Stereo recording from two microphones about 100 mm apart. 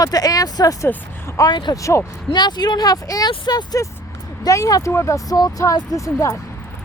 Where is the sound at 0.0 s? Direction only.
40° left (ahead or behind).